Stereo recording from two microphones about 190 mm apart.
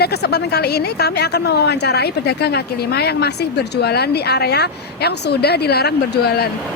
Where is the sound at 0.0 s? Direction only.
60° left (ahead or behind).